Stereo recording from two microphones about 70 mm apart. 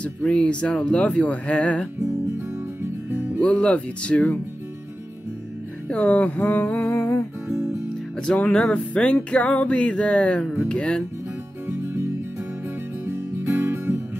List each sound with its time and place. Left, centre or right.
0.0 s music: centre
3.4 s music: centre
5.9 s music: centre; by 7.2 s left
8.4 s music: centre
11.7 s music: right